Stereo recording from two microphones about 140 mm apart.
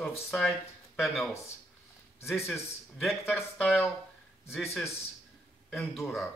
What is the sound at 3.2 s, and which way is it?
Speech, 15° left (ahead or behind).